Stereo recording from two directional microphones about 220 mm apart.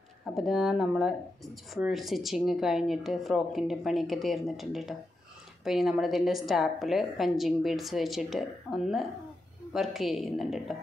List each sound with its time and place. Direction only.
0.3 s speech: centre (ahead or behind)